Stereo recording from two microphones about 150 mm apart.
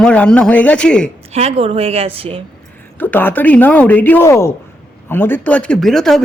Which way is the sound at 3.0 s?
15° left (ahead or behind).